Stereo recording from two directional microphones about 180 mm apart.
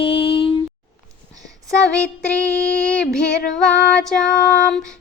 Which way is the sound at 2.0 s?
5° left (ahead or behind).